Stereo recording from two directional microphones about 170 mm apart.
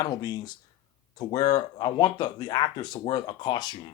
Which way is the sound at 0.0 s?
20° left (ahead or behind).